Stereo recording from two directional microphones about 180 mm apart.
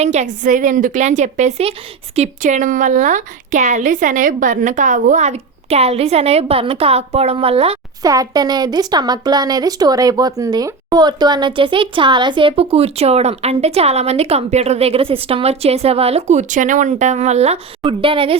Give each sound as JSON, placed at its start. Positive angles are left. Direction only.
{"t": 0.0, "sound": "speech", "side_deg": -40}
{"t": 8.0, "sound": "speech", "side_deg": -20}